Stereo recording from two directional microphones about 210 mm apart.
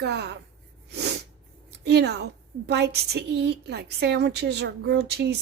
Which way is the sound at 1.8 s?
50° right (ahead or behind).